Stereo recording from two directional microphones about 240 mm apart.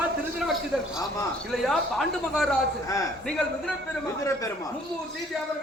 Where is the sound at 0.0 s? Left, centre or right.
Centre.